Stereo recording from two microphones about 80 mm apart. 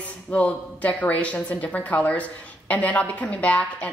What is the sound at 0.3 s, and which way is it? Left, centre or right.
A man's voice, centre.